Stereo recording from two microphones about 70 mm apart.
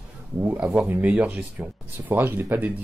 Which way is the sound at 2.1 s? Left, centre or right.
Right.